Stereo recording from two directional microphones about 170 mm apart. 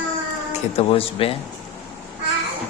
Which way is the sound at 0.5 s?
35° left (ahead or behind).